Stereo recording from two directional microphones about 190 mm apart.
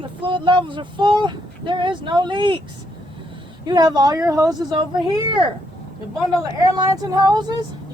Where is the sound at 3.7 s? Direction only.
20° right (ahead or behind).